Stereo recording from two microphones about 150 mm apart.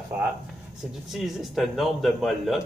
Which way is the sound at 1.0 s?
Centre (ahead or behind).